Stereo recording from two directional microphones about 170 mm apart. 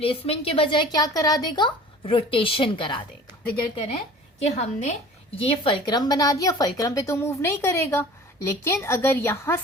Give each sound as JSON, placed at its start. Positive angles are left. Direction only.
{"t": 0.0, "sound": "a woman's voice", "side_deg": 35}
{"t": 4.4, "sound": "a woman's voice", "side_deg": 40}
{"t": 5.4, "sound": "a woman's voice", "side_deg": 30}